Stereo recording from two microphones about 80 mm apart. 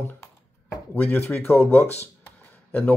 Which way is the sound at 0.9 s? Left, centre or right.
Left.